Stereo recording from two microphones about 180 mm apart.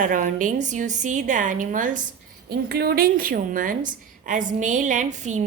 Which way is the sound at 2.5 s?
60° right (ahead or behind).